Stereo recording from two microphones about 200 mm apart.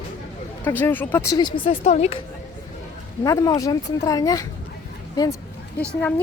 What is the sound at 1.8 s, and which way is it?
Speech, 35° left (ahead or behind).